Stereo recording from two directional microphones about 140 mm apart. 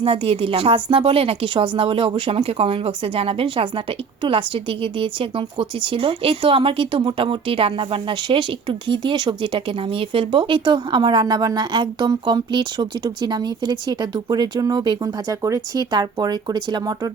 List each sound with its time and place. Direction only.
0.0 s speech: 45° right (ahead or behind)